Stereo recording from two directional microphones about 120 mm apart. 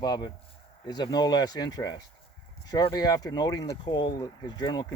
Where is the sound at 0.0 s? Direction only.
35° left (ahead or behind).